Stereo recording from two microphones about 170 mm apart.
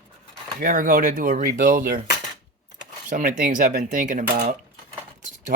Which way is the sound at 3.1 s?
50° right (ahead or behind).